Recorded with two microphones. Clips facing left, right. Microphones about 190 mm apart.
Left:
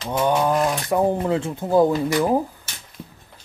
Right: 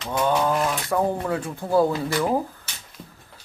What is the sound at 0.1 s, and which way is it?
Speech, 15° left (ahead or behind).